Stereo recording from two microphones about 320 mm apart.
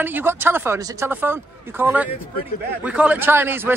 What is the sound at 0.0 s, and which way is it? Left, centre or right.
A man's voice, centre.